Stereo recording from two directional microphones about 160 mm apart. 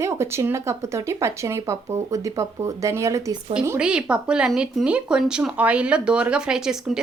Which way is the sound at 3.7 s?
5° right (ahead or behind).